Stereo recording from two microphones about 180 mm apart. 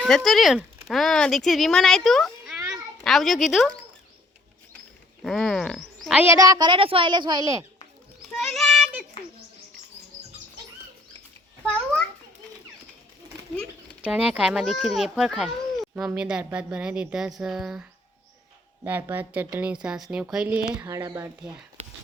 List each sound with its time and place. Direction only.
0.3 s a child's voice: centre (ahead or behind)
5.2 s speech: 5° left (ahead or behind)
6.1 s a woman's voice: 15° right (ahead or behind)
8.2 s music: centre (ahead or behind)
11.6 s a child's voice: 5° left (ahead or behind)
14.0 s a child's voice: 5° right (ahead or behind)
18.9 s speech: 10° right (ahead or behind)
20.8 s speech: 20° right (ahead or behind)